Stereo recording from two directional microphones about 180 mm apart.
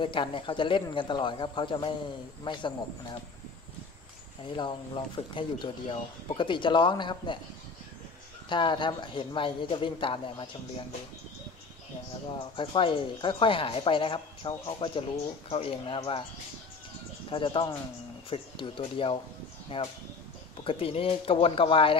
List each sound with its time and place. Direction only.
0.0 s speech: 30° left (ahead or behind)
4.6 s speech: 25° left (ahead or behind)
8.5 s speech: 25° left (ahead or behind)
12.4 s speech: 30° left (ahead or behind)
17.3 s speech: 30° left (ahead or behind)